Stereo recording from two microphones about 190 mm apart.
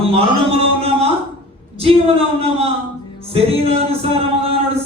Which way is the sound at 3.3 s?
30° right (ahead or behind).